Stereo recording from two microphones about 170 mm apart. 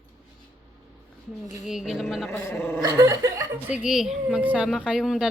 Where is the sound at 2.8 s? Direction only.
20° right (ahead or behind).